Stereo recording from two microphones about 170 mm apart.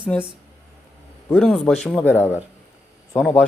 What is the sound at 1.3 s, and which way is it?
Speech, 5° left (ahead or behind).